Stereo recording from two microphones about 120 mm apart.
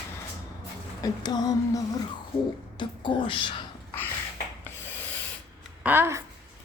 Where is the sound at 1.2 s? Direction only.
35° left (ahead or behind).